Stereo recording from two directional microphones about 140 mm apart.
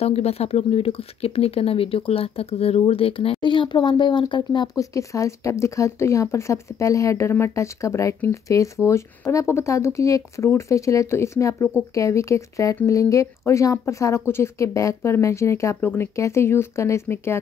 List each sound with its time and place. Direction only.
0.0 s speech: 45° left (ahead or behind); by 17.4 s 20° left (ahead or behind)